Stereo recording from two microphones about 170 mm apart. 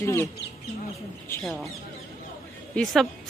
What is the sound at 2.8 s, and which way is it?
Speech, 10° left (ahead or behind).